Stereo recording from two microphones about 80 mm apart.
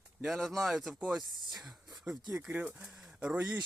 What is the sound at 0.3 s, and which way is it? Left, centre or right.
Speech, centre.